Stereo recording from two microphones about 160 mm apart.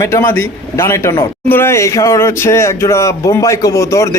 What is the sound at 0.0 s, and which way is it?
A man's voice, 20° left (ahead or behind).